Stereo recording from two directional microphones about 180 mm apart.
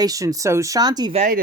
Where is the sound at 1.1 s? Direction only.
45° right (ahead or behind).